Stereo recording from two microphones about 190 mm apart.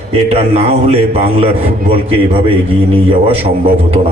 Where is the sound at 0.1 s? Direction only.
35° right (ahead or behind).